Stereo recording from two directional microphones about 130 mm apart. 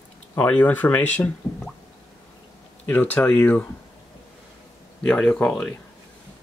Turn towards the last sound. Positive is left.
turn(degrees=5)  # may be behind; listen again after turning